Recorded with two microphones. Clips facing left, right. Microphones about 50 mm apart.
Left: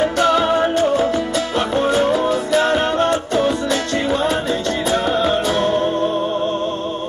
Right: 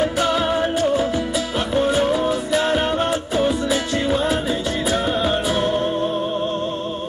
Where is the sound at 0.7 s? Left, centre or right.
Centre.